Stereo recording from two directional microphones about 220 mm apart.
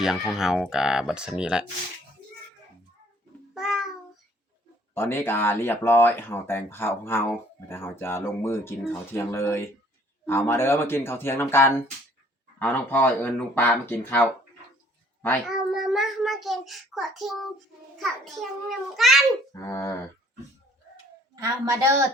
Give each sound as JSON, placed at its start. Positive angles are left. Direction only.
{"t": 0.0, "sound": "speech", "side_deg": 0}
{"t": 3.5, "sound": "cat", "side_deg": 0}
{"t": 4.9, "sound": "speech", "side_deg": 10}
{"t": 15.4, "sound": "a child's voice", "side_deg": 0}
{"t": 19.5, "sound": "speech", "side_deg": 10}
{"t": 21.3, "sound": "a woman's voice", "side_deg": -15}